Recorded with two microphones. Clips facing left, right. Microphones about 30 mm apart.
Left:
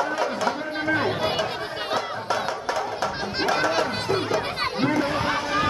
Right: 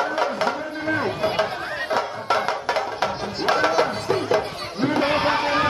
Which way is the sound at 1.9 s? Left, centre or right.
Right.